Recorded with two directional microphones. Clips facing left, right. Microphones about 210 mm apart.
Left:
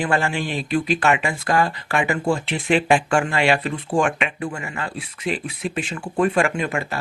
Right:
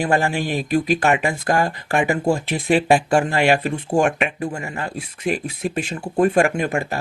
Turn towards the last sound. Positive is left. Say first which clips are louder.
# right 3 dB
turn(degrees=-40)  # may be behind; listen again after turning